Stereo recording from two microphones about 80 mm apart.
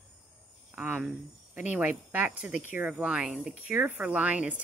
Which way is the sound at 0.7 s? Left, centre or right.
Right.